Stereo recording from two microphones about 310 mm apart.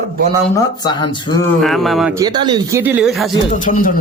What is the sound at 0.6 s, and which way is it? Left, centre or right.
Speech, centre.